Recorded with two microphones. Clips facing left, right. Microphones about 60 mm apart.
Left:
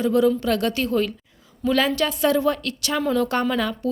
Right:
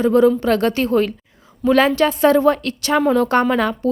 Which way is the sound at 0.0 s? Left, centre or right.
Right.